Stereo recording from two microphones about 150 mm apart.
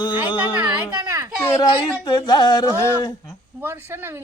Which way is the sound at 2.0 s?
30° left (ahead or behind).